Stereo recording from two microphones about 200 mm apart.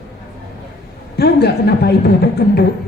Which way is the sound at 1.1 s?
55° left (ahead or behind).